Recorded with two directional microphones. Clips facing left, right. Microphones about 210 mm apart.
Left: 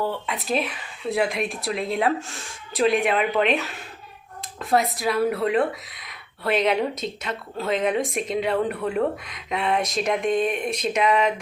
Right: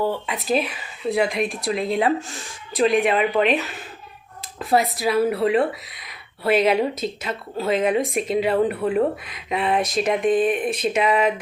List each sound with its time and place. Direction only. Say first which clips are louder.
0.0 s speech: right 3 dB; centre (ahead or behind)